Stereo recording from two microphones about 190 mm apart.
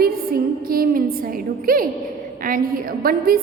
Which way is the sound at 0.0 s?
50° right (ahead or behind).